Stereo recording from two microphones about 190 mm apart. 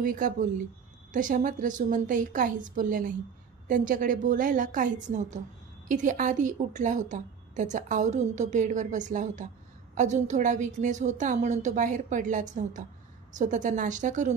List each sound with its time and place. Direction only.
0.0 s a woman's voice: 45° right (ahead or behind)